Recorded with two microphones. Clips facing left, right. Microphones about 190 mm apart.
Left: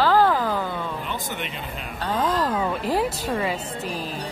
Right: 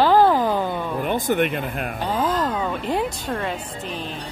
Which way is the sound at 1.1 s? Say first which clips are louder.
Right 10 dB; 55° right (ahead or behind).